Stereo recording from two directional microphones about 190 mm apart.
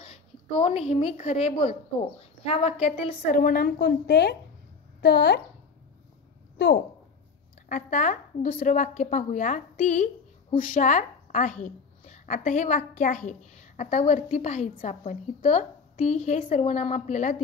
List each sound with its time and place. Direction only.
0.6 s a woman's voice: 30° left (ahead or behind)
3.4 s a woman's voice: 50° left (ahead or behind)
7.6 s a woman's voice: 45° left (ahead or behind)